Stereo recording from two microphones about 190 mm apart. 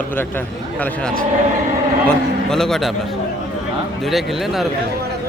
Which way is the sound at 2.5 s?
Centre (ahead or behind).